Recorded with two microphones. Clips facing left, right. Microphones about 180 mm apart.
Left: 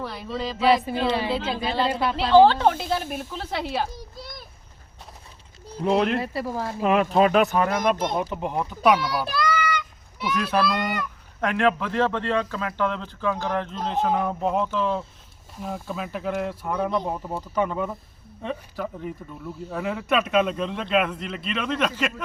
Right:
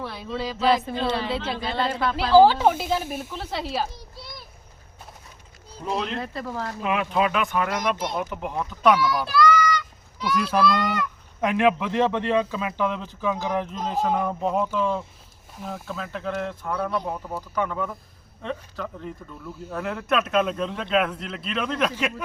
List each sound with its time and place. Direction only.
0.0 s speech: centre (ahead or behind)
5.8 s speech: 65° left (ahead or behind)
6.1 s speech: 10° left (ahead or behind)
6.8 s speech: 40° left (ahead or behind)
7.7 s speech: 50° left (ahead or behind)
8.3 s speech: 20° left (ahead or behind)
10.2 s speech: 10° left (ahead or behind)
11.3 s speech: 15° right (ahead or behind); by 17.9 s 20° left (ahead or behind)
18.4 s speech: 10° left (ahead or behind)